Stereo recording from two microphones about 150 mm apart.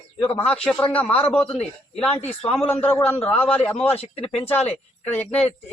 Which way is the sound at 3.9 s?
40° left (ahead or behind).